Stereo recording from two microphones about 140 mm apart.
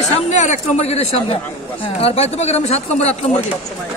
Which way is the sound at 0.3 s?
55° left (ahead or behind).